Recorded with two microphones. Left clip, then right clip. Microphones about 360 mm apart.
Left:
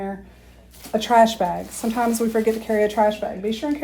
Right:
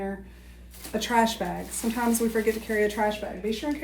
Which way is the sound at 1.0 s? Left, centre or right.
Centre.